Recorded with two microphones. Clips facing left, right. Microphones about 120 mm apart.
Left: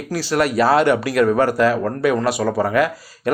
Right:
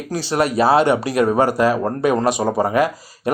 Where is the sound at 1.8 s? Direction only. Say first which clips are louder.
Right 1 dB; 25° right (ahead or behind).